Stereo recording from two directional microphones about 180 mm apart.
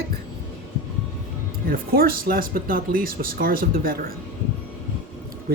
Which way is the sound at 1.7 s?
55° right (ahead or behind).